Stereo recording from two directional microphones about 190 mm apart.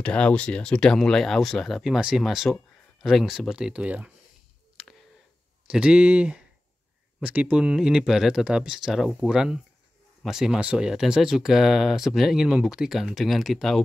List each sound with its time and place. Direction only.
0.0 s speech: 5° left (ahead or behind)
5.7 s speech: 5° right (ahead or behind)